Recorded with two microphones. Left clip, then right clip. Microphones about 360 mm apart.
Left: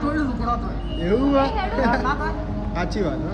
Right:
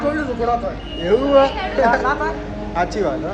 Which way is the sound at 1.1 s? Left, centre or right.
Right.